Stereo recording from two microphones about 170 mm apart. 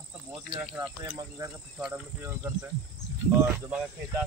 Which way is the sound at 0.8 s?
20° right (ahead or behind).